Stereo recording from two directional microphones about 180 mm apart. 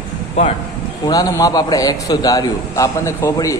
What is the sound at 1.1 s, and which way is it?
A man's voice, 20° left (ahead or behind).